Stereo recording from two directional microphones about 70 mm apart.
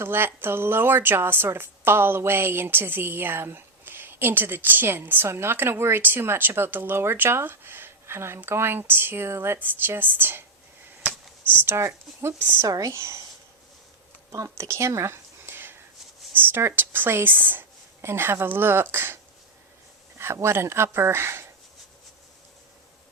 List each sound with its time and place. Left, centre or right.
0.0 s a woman's voice: right
11.5 s a woman's voice: right
12.6 s speech: right
12.9 s speech: right
14.3 s a woman's voice: right